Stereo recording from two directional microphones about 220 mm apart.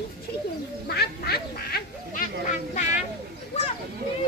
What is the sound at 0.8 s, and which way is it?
Quack, 45° left (ahead or behind).